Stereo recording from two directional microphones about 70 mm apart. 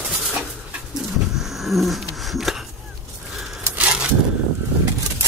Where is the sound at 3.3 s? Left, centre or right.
Centre.